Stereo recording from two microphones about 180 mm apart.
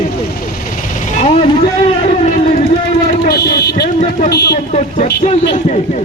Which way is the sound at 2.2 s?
40° left (ahead or behind).